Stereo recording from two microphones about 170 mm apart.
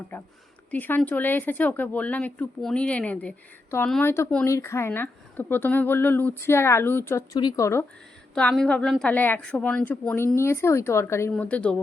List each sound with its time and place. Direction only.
0.1 s a sound: 15° left (ahead or behind)
0.7 s speech: 10° left (ahead or behind)
8.4 s speech: 5° left (ahead or behind)